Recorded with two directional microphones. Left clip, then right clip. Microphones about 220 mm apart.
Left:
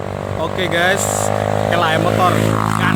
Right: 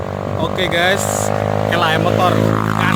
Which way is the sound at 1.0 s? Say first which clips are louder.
Even; 50° left (ahead or behind).